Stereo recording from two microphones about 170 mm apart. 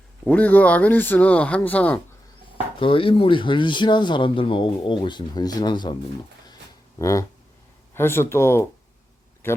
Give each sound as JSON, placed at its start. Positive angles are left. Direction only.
{"t": 0.3, "sound": "speech", "side_deg": 10}
{"t": 2.7, "sound": "speech", "side_deg": 30}
{"t": 7.0, "sound": "speech", "side_deg": 20}